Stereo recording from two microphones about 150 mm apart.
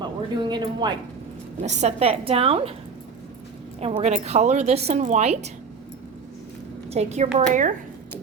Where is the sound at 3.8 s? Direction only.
40° right (ahead or behind).